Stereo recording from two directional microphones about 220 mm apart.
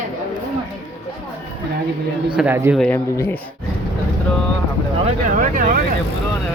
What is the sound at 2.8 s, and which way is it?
Speech, 10° left (ahead or behind).